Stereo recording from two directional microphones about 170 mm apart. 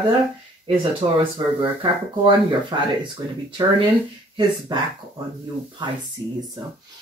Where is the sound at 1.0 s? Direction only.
35° right (ahead or behind).